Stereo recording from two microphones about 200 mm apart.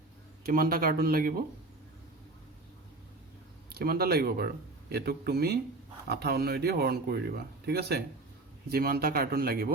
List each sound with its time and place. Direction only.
0.4 s speech: 45° right (ahead or behind)
3.8 s speech: 50° right (ahead or behind)